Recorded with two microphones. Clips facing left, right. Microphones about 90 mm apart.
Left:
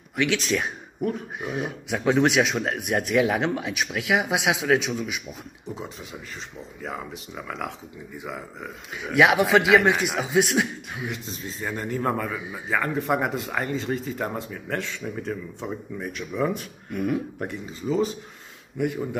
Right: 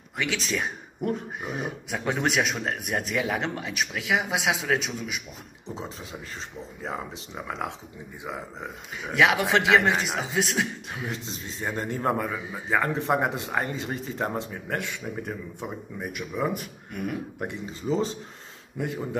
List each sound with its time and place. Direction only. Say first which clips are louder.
0.2 s a man's voice: left 4 dB; centre (ahead or behind)
6.8 s speech: even; 30° right (ahead or behind)
8.9 s a man's voice: left 7 dB; 5° left (ahead or behind)
9.2 s a man's voice: left 3 dB; 15° left (ahead or behind)
11.1 s speech: left 2 dB; 25° right (ahead or behind)
16.9 s a man's voice: left 6 dB; centre (ahead or behind)
17.4 s speech: left 1 dB; 25° right (ahead or behind)